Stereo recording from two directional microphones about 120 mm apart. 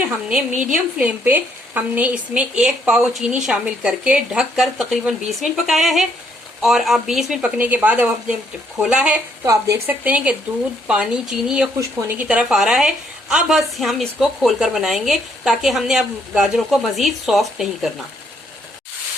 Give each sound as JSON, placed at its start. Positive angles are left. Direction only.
{"t": 0.0, "sound": "a woman's voice", "side_deg": -10}
{"t": 7.6, "sound": "speech", "side_deg": -15}
{"t": 9.4, "sound": "a woman's voice", "side_deg": -25}